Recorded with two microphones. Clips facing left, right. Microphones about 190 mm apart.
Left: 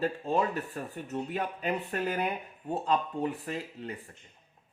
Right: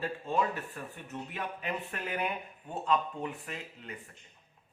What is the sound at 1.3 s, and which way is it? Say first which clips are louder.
Speech: left 4 dB; 35° left (ahead or behind).